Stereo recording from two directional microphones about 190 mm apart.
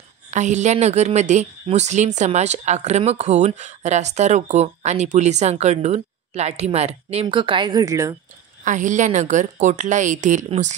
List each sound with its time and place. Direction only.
0.3 s a woman's voice: 40° right (ahead or behind); by 8.2 s 15° right (ahead or behind)
8.6 s a woman's voice: 40° right (ahead or behind)